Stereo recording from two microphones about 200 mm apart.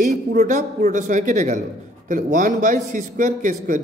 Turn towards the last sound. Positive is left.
turn(degrees=-40)  # may be behind; listen again after turning